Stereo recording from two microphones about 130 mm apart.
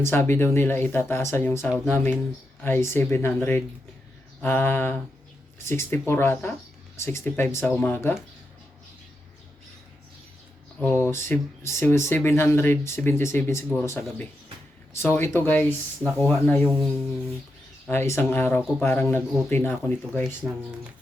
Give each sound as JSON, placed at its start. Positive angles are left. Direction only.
{"t": 0.0, "sound": "speech", "side_deg": 20}
{"t": 10.8, "sound": "speech", "side_deg": 15}
{"t": 17.8, "sound": "speech", "side_deg": 20}
{"t": 20.4, "sound": "speech", "side_deg": 0}